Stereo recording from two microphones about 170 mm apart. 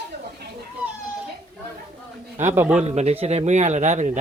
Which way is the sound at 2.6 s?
10° right (ahead or behind).